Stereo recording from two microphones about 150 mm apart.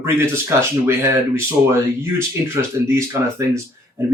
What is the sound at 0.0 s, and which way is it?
Speech, 15° right (ahead or behind).